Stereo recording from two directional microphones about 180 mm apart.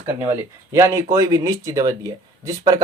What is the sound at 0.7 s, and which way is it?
Speech, 15° right (ahead or behind).